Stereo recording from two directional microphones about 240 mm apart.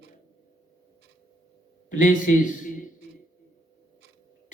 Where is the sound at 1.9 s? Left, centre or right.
Left.